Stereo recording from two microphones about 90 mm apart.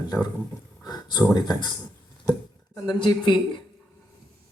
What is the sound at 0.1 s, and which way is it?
Speech, 40° left (ahead or behind).